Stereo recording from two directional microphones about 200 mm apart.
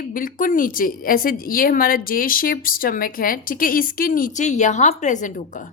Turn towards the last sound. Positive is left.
turn(degrees=40)  # may be behind; listen again after turning